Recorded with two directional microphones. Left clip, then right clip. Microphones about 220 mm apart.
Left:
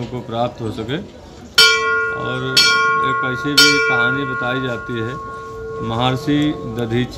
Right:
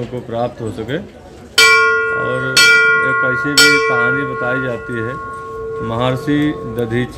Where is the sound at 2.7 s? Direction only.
35° right (ahead or behind).